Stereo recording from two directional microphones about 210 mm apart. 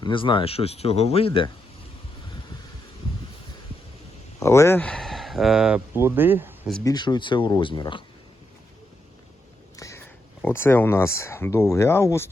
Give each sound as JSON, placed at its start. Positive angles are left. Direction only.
{"t": 0.0, "sound": "speech", "side_deg": 25}
{"t": 4.4, "sound": "speech", "side_deg": 15}
{"t": 6.8, "sound": "speech", "side_deg": 20}
{"t": 9.7, "sound": "a sound", "side_deg": 15}
{"t": 10.4, "sound": "speech", "side_deg": 10}